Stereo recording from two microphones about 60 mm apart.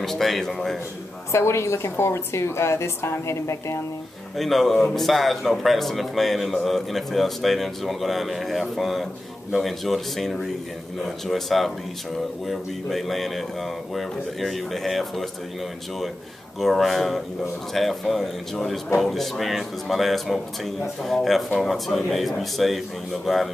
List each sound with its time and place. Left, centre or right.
0.0 s speech: centre
1.3 s a woman's voice: left
4.4 s speech: centre
16.5 s speech: centre